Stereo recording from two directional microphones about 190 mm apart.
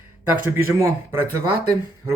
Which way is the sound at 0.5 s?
15° right (ahead or behind).